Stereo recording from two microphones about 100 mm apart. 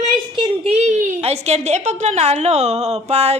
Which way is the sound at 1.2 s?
90° right.